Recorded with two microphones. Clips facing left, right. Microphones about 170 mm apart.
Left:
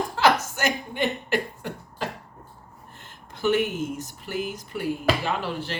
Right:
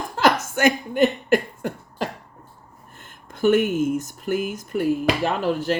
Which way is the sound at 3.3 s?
50° right (ahead or behind).